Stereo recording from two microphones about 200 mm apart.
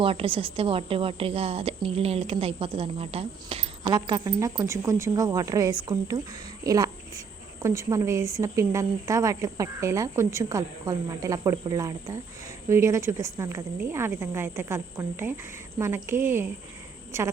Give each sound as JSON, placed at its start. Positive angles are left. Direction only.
{"t": 0.0, "sound": "a woman's voice", "side_deg": -25}